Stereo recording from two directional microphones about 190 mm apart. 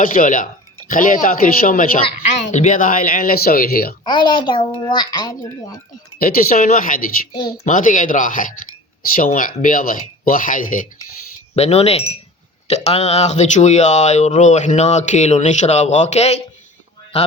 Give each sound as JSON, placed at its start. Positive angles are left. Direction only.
{"t": 0.0, "sound": "speech", "side_deg": 45}
{"t": 4.0, "sound": "speech", "side_deg": 25}
{"t": 6.1, "sound": "speech", "side_deg": 45}
{"t": 11.5, "sound": "speech", "side_deg": 35}